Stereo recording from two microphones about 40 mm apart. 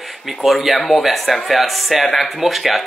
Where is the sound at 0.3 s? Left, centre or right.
Centre.